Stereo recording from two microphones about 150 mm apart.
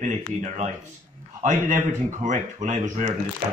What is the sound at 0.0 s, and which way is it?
Speech, 55° right (ahead or behind).